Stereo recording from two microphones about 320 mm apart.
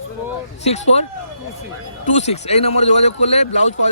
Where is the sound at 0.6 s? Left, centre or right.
Left.